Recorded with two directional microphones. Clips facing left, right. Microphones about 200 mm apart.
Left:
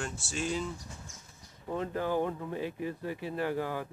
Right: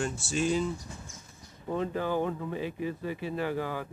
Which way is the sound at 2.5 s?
10° right (ahead or behind).